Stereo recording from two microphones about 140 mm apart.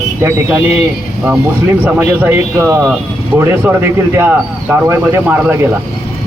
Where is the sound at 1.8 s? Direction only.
15° right (ahead or behind).